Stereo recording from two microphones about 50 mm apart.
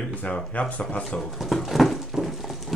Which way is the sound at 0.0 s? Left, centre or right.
Left.